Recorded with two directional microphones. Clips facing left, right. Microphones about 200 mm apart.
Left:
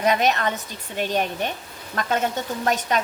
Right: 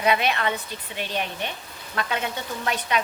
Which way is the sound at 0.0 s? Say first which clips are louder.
Left 2 dB; 45° left (ahead or behind).